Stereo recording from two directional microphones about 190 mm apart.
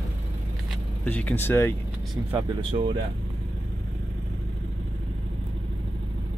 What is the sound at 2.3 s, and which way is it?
Speech, 30° right (ahead or behind).